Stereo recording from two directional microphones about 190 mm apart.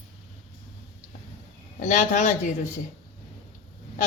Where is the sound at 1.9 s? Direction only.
40° left (ahead or behind).